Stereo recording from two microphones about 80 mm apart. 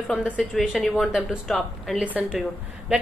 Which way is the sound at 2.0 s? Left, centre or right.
Centre.